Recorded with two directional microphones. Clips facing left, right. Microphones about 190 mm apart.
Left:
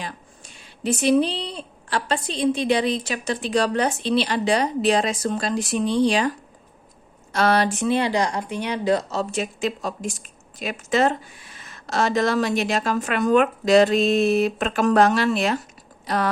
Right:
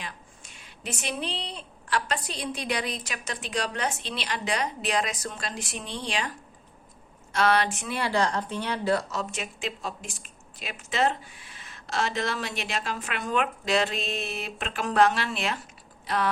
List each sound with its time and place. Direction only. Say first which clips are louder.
0.0 s a woman's voice: left 6 dB; 35° left (ahead or behind)
7.3 s a woman's voice: left 4 dB; 40° left (ahead or behind)
7.9 s a woman's voice: left 6 dB; 20° left (ahead or behind); by 15.5 s 40° left (ahead or behind)
16.0 s a sound: left 4 dB; 40° left (ahead or behind)